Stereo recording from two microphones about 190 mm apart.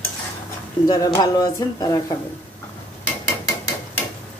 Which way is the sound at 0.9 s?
20° left (ahead or behind).